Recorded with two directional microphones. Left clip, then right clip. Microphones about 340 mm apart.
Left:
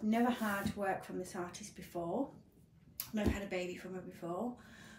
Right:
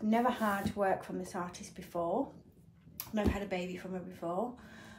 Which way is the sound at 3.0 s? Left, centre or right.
Centre.